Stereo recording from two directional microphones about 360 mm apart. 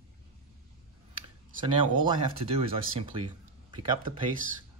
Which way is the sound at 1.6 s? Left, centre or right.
Centre.